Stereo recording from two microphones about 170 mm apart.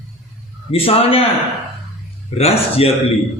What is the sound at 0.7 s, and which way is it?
Speech, 35° left (ahead or behind).